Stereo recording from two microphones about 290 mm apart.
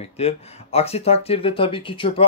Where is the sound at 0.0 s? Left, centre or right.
Left.